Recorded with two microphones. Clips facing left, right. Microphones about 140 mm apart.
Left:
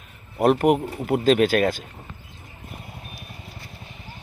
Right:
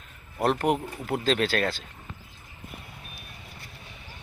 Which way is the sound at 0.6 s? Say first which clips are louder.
Left 6 dB; 15° left (ahead or behind).